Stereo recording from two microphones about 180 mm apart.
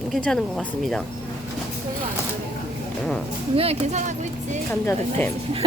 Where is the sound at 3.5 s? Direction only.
35° right (ahead or behind).